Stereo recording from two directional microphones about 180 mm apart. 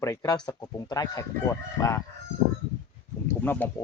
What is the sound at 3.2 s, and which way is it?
Speech, 10° left (ahead or behind).